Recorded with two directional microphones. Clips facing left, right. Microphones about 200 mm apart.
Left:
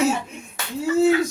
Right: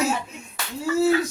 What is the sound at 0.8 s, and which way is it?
Speech, 20° left (ahead or behind).